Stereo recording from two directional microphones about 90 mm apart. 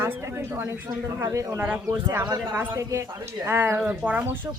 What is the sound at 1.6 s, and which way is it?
Speech, 20° right (ahead or behind).